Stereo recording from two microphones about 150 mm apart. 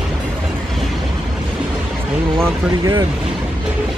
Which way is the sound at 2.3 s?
15° right (ahead or behind).